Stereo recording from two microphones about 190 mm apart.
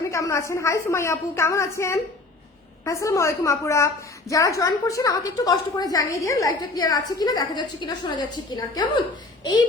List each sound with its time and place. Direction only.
0.1 s a woman's voice: 15° left (ahead or behind)